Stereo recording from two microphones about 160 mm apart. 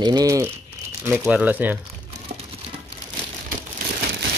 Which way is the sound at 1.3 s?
10° right (ahead or behind).